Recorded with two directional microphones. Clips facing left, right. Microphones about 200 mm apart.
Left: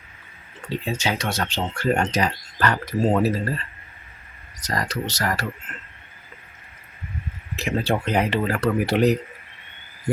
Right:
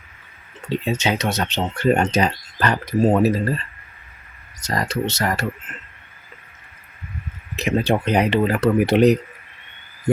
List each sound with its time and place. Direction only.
0.9 s speech: 20° right (ahead or behind)
4.6 s speech: 25° right (ahead or behind)
7.5 s speech: 20° right (ahead or behind)